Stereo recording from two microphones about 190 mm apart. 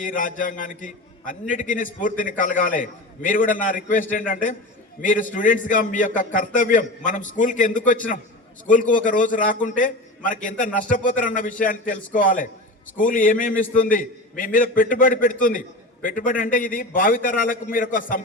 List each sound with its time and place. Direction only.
0.0 s a man's voice: 45° left (ahead or behind)